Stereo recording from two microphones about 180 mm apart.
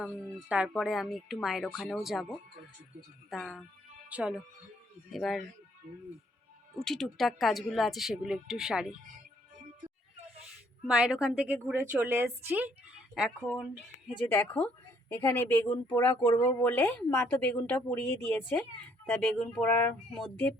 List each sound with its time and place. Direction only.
0.0 s a woman's voice: 5° right (ahead or behind)
6.7 s a woman's voice: centre (ahead or behind)
10.9 s a woman's voice: 5° right (ahead or behind)
13.4 s speech: 10° left (ahead or behind)